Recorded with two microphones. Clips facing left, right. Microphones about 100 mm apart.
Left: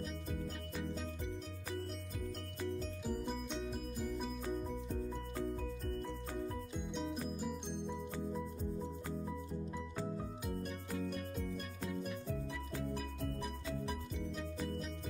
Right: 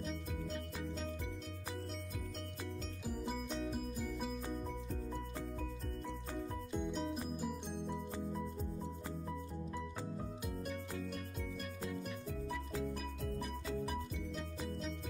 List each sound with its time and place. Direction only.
3.1 s music: 5° right (ahead or behind)
6.9 s music: centre (ahead or behind)
11.8 s music: centre (ahead or behind)